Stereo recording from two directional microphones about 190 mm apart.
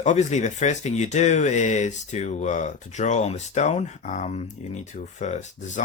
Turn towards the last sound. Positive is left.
turn(degrees=40)  # may be behind; listen again after turning